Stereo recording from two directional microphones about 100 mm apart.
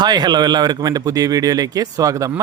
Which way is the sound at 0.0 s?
45° right (ahead or behind).